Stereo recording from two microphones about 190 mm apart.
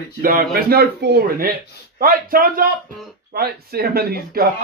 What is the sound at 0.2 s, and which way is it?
Speech, 50° right (ahead or behind).